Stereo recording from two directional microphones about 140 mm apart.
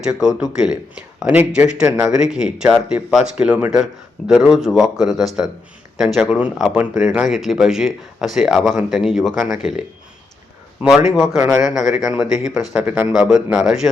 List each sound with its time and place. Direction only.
0.0 s speech: 5° right (ahead or behind)
10.8 s speech: 5° right (ahead or behind)
11.3 s speech: 15° right (ahead or behind)
11.6 s speech: 5° right (ahead or behind)